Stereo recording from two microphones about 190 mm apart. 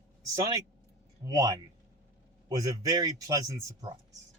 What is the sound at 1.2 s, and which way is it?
A man's voice, 20° right (ahead or behind).